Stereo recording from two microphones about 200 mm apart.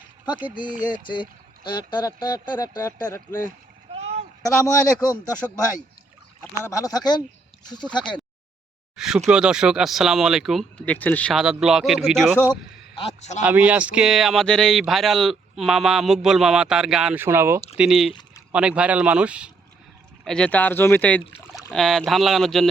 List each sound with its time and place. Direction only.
0.4 s speech: 20° left (ahead or behind)
3.9 s a sound: 30° right (ahead or behind)
4.4 s speech: 15° left (ahead or behind)
6.6 s speech: 15° left (ahead or behind)
9.0 s speech: 5° right (ahead or behind)
13.0 s a man's voice: 30° left (ahead or behind)
13.4 s speech: 10° right (ahead or behind)
18.1 s a sound: 20° left (ahead or behind)
18.5 s speech: 5° right (ahead or behind)
20.2 s speech: 5° left (ahead or behind)